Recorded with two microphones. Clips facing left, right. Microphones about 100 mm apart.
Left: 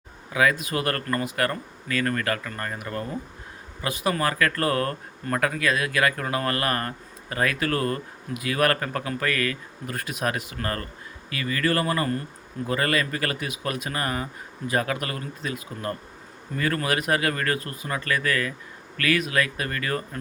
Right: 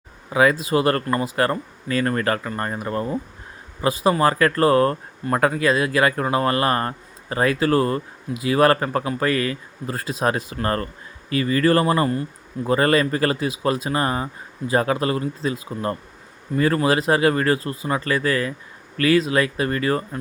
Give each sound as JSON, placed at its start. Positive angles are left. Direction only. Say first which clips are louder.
{"t": 0.3, "sound": "speech", "louder": "right 5 dB", "side_deg": -30}